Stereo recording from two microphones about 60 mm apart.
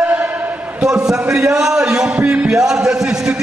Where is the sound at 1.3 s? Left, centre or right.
Centre.